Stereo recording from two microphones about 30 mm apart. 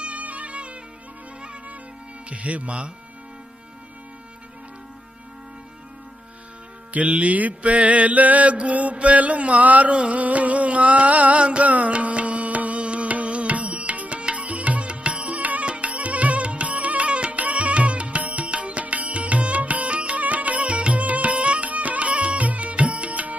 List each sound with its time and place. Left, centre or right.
0.0 s music: right
2.3 s mantra: right
6.9 s mantra: right
9.9 s music: right
14.8 s music: right
15.6 s music: right
17.1 s music: right
17.4 s music: right
20.2 s music: right